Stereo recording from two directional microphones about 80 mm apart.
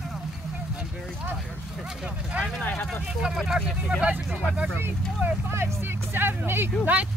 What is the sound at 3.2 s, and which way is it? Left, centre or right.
Speech, centre.